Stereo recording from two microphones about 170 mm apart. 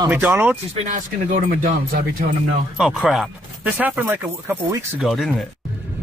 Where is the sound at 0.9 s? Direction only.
50° right (ahead or behind).